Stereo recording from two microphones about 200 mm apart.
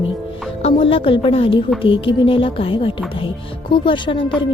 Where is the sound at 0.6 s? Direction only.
25° left (ahead or behind).